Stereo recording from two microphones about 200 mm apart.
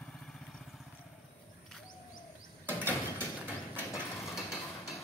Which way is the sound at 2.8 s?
10° left (ahead or behind).